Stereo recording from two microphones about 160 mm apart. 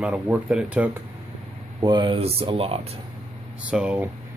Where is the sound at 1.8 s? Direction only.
30° right (ahead or behind).